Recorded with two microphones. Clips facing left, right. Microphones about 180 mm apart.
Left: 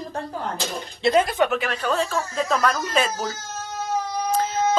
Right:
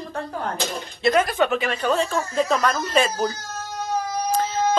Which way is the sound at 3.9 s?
Centre (ahead or behind).